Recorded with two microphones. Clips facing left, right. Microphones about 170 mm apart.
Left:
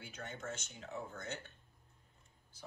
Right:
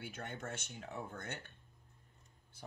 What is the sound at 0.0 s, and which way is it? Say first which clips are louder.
Speech: right 1 dB; 55° right (ahead or behind).